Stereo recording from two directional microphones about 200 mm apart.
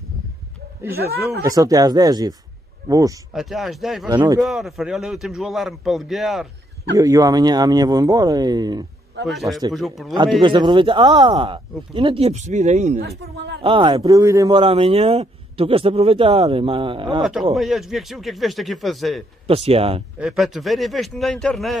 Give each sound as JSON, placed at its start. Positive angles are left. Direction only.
{"t": 0.9, "sound": "speech", "side_deg": -50}
{"t": 1.4, "sound": "a man's voice", "side_deg": -15}
{"t": 3.3, "sound": "a man's voice", "side_deg": 0}
{"t": 4.1, "sound": "a man's voice", "side_deg": -25}
{"t": 4.4, "sound": "a man's voice", "side_deg": 0}
{"t": 7.0, "sound": "a man's voice", "side_deg": -15}
{"t": 9.2, "sound": "a man's voice", "side_deg": 0}
{"t": 9.5, "sound": "a man's voice", "side_deg": -20}
{"t": 9.8, "sound": "a man's voice", "side_deg": 0}
{"t": 10.4, "sound": "a man's voice", "side_deg": -25}
{"t": 17.2, "sound": "a man's voice", "side_deg": 0}
{"t": 19.4, "sound": "a man's voice", "side_deg": -30}
{"t": 20.2, "sound": "a man's voice", "side_deg": 0}